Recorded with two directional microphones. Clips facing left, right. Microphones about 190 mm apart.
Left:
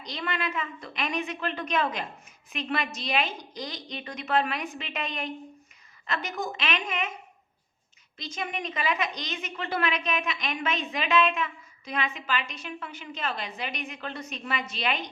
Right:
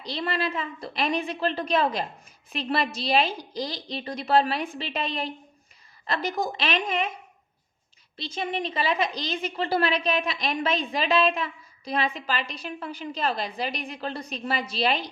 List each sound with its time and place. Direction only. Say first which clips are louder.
0.0 s a woman's voice: right 4 dB; 30° right (ahead or behind)
8.1 s a woman's voice: right 4 dB; 30° right (ahead or behind)